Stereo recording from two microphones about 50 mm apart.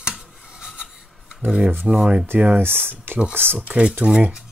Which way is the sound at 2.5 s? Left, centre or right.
Right.